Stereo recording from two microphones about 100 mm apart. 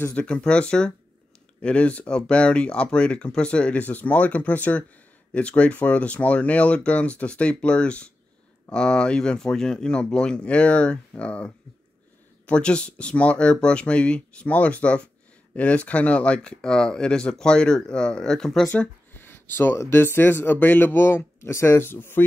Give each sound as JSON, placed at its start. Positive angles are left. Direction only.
{"t": 0.0, "sound": "speech", "side_deg": 10}
{"t": 18.7, "sound": "speech", "side_deg": 20}